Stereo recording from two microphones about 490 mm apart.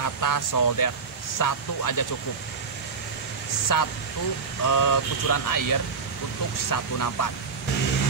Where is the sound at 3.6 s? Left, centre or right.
Left.